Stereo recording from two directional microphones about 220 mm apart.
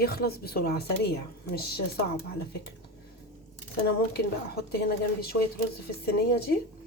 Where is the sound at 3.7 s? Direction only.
45° left (ahead or behind).